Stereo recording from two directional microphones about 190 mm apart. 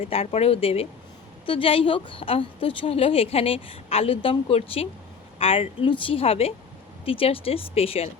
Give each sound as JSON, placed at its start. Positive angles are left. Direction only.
{"t": 0.0, "sound": "a woman's voice", "side_deg": 30}